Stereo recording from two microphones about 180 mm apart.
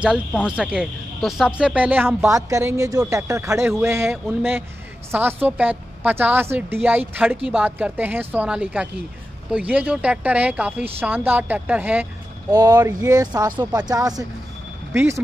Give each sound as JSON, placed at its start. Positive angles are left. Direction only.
{"t": 0.0, "sound": "speech", "side_deg": -5}
{"t": 12.4, "sound": "speech", "side_deg": -20}